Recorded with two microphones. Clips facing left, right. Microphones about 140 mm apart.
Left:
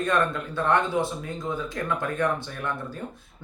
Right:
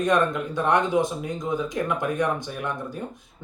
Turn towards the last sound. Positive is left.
turn(degrees=-15)  # may be behind; listen again after turning